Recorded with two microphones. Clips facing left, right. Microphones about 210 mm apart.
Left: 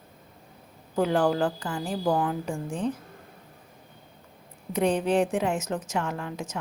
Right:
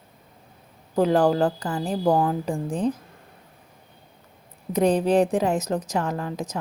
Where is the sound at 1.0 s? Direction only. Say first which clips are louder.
Right 4 dB; 35° right (ahead or behind).